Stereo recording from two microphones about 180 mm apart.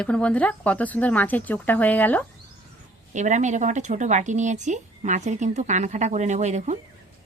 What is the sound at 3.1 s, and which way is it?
Speech, 40° right (ahead or behind).